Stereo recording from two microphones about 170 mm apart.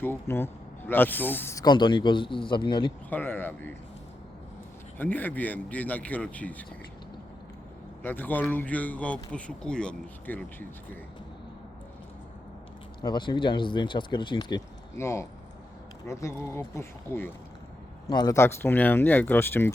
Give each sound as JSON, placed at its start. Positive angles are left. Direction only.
{"t": 0.0, "sound": "speech", "side_deg": 15}
{"t": 3.1, "sound": "speech", "side_deg": 10}
{"t": 4.9, "sound": "speech", "side_deg": 10}
{"t": 8.0, "sound": "speech", "side_deg": 10}
{"t": 13.0, "sound": "speech", "side_deg": 25}
{"t": 18.1, "sound": "speech", "side_deg": 25}